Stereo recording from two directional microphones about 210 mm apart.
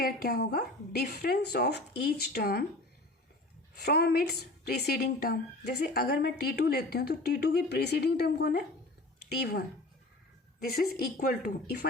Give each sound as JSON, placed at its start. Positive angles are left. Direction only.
{"t": 0.0, "sound": "a woman's voice", "side_deg": 45}
{"t": 3.8, "sound": "a woman's voice", "side_deg": 50}